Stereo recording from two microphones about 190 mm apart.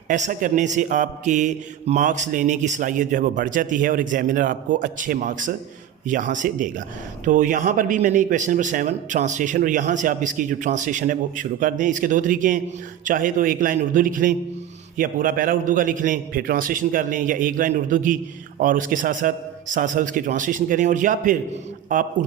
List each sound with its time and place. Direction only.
0.1 s mantra: 45° right (ahead or behind)